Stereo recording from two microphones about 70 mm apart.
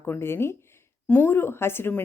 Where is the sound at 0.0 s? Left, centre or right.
Left.